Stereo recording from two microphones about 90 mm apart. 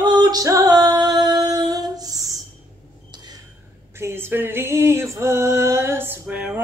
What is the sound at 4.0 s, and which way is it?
Music, 25° right (ahead or behind).